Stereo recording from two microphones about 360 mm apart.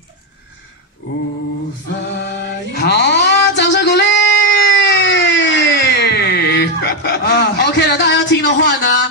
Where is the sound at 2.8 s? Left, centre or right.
Left.